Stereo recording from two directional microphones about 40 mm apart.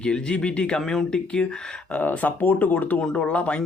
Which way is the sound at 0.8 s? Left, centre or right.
Centre.